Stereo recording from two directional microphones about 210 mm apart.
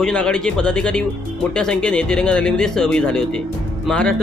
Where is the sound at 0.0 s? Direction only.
5° left (ahead or behind).